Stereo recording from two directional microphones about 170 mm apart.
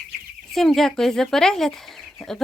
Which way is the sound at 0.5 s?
Centre (ahead or behind).